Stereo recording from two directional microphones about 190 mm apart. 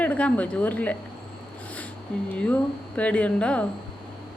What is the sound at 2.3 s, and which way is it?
A woman's voice, 10° left (ahead or behind).